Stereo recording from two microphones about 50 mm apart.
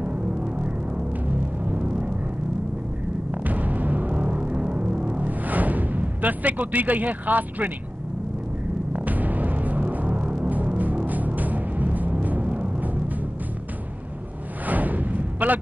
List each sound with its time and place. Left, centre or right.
0.0 s music: right
3.3 s music: right
8.9 s music: right
14.7 s a sound: right